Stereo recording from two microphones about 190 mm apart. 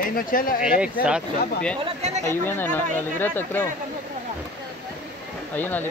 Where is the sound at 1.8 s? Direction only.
35° right (ahead or behind).